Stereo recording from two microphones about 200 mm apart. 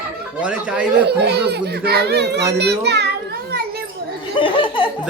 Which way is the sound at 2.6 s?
55° right (ahead or behind).